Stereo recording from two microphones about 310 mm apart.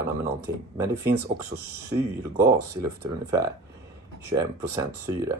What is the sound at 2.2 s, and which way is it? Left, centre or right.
Speech, centre.